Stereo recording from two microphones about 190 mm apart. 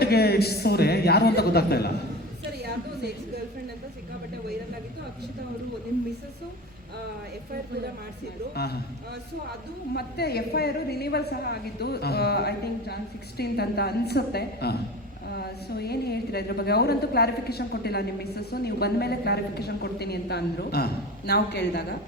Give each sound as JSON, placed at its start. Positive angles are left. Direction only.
{"t": 0.0, "sound": "a man's voice", "side_deg": 55}
{"t": 2.6, "sound": "a sound", "side_deg": -60}
{"t": 8.5, "sound": "a woman's voice", "side_deg": 55}
{"t": 9.9, "sound": "a woman's voice", "side_deg": 55}